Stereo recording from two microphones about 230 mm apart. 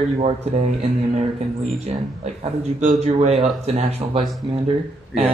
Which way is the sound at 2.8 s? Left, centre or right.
Right.